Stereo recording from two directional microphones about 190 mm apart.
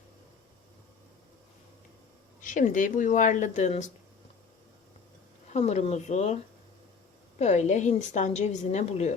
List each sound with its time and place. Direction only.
2.4 s a woman's voice: 45° left (ahead or behind)
5.5 s a woman's voice: 35° left (ahead or behind)